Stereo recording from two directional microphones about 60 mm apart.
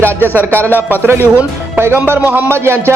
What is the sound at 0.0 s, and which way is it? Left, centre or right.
Music, right.